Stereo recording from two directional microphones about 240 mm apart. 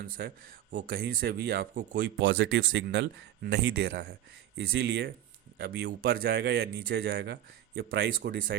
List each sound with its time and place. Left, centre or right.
0.0 s speech: right
2.1 s speech: right